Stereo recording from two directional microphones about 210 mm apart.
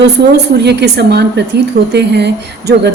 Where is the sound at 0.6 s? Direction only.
50° right (ahead or behind).